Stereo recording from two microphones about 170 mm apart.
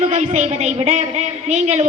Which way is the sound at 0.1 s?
40° right (ahead or behind).